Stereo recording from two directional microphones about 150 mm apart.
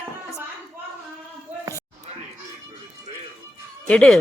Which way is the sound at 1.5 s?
10° right (ahead or behind).